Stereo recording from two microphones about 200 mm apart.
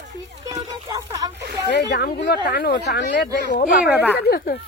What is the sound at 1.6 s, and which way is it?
Speech, 55° left (ahead or behind).